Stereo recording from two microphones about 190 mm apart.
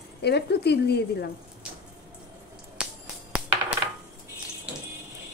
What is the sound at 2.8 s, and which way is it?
Finger snapping, 5° right (ahead or behind).